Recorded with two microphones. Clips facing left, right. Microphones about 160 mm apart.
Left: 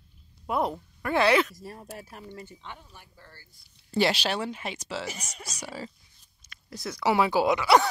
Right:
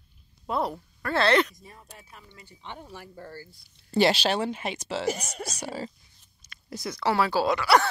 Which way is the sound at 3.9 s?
30° right (ahead or behind).